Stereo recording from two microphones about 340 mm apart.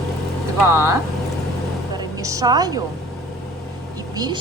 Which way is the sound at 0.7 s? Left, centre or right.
Centre.